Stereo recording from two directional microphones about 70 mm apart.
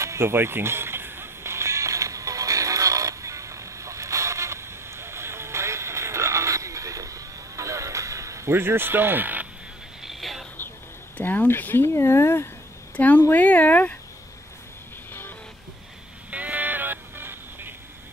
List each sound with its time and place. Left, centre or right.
0.0 s music: right
10.0 s a sound: centre
11.1 s speech: left
12.9 s speech: left
16.3 s music: right